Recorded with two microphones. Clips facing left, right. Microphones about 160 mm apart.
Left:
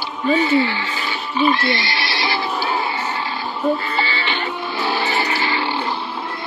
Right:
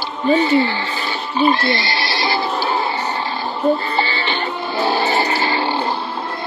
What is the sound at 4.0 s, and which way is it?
Music, 35° right (ahead or behind).